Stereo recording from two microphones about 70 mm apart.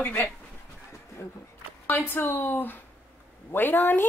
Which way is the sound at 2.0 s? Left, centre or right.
Left.